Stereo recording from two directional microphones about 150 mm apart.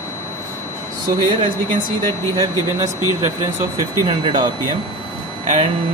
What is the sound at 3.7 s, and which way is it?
Speech, 25° left (ahead or behind).